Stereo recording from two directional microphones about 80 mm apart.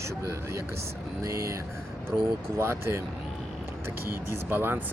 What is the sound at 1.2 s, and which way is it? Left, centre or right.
Speech, right.